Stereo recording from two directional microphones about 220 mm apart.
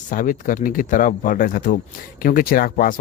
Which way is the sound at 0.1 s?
35° left (ahead or behind).